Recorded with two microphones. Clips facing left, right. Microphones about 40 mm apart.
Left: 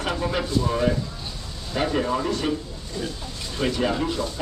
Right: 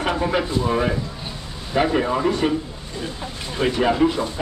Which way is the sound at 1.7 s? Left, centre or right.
Centre.